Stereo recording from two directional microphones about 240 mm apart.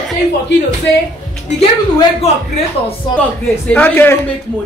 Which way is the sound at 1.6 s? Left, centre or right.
Left.